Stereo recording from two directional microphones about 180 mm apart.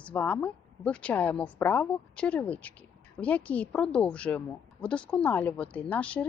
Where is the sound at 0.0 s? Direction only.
10° left (ahead or behind).